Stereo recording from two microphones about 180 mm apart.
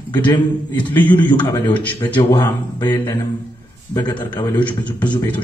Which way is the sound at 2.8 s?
25° left (ahead or behind).